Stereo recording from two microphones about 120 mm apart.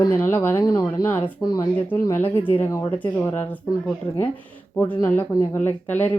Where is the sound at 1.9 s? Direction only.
15° left (ahead or behind).